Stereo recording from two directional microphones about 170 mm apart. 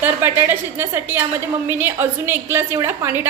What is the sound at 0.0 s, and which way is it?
A woman's voice, 10° right (ahead or behind).